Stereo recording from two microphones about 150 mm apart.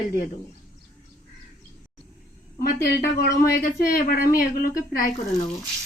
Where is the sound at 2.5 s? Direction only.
85° left.